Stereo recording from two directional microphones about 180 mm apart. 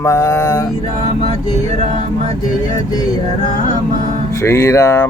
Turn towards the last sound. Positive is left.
turn(degrees=20)  # may be behind; listen again after turning